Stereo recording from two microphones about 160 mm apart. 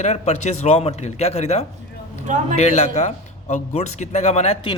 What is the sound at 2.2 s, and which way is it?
Speech, 50° right (ahead or behind).